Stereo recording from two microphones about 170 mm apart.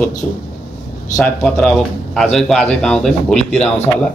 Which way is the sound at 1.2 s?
5° left (ahead or behind).